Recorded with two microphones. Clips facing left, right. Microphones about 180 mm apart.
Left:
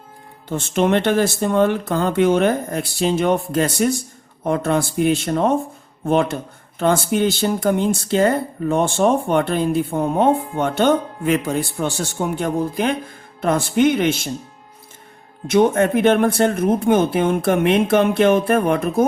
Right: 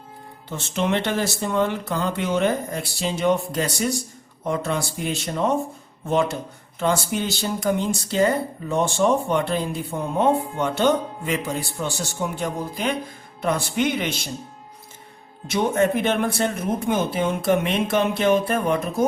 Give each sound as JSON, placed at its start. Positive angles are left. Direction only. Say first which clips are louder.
{"t": 0.4, "sound": "speech", "louder": "left 6 dB", "side_deg": 50}
{"t": 15.4, "sound": "speech", "louder": "left 5 dB", "side_deg": 55}